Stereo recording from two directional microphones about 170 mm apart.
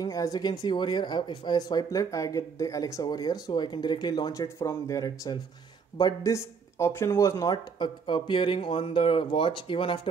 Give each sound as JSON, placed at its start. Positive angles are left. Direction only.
{"t": 0.0, "sound": "speech", "side_deg": 20}